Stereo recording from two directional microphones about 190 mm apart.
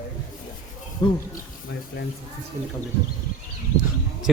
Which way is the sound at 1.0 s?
25° left (ahead or behind).